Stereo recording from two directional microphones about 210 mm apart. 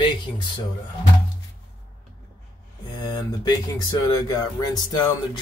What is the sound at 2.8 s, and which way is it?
Speech, 20° left (ahead or behind).